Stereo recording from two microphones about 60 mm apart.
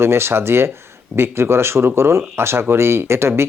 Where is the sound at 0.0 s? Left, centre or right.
Right.